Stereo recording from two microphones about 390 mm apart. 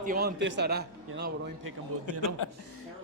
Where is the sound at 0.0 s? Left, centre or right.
Right.